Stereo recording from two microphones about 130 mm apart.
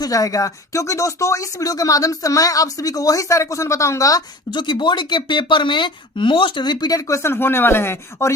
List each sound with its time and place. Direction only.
0.0 s speech: 25° left (ahead or behind)